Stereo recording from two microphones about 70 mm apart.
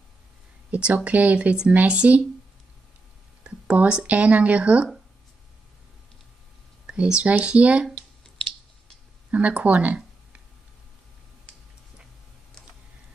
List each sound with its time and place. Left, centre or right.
0.7 s speech: centre
3.4 s speech: centre
6.9 s speech: centre
9.3 s speech: centre